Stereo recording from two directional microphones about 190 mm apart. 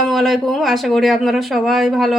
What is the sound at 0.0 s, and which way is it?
Speech, centre (ahead or behind).